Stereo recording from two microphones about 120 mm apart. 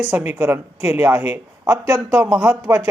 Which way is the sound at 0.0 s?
10° right (ahead or behind).